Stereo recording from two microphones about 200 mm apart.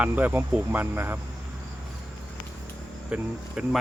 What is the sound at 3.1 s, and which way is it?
Speech, 5° right (ahead or behind).